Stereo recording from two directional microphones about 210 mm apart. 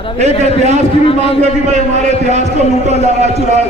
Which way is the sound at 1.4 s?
35° right (ahead or behind).